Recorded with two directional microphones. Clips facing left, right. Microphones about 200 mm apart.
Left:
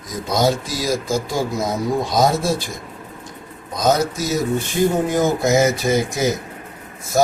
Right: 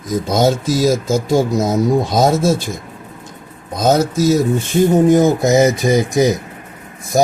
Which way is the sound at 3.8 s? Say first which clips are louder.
Right 4 dB; 25° right (ahead or behind).